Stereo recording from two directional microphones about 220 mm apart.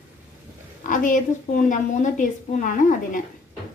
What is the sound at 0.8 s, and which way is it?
A woman's voice, 35° left (ahead or behind).